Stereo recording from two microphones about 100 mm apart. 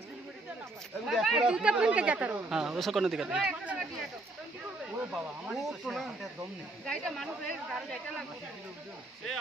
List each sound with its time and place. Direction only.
1.0 s speech: 5° right (ahead or behind)
5.1 s speech: 5° right (ahead or behind)